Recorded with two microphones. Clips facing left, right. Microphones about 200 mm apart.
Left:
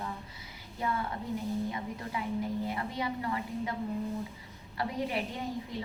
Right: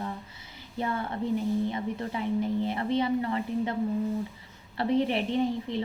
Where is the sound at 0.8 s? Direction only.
30° right (ahead or behind).